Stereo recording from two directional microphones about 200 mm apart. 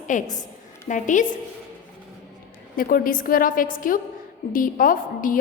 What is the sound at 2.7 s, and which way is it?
A woman's voice, 45° left (ahead or behind).